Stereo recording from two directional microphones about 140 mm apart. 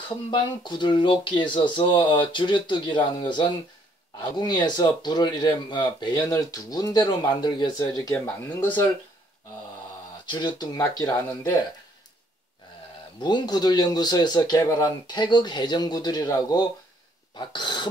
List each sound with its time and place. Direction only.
0.3 s speech: 35° left (ahead or behind)
8.5 s speech: 10° left (ahead or behind)
10.3 s speech: 30° left (ahead or behind)
13.2 s speech: 30° left (ahead or behind)